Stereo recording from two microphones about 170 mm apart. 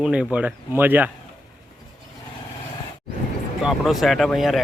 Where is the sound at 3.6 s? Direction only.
Centre (ahead or behind).